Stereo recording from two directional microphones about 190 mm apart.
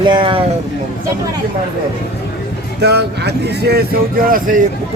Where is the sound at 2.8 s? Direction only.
60° right (ahead or behind).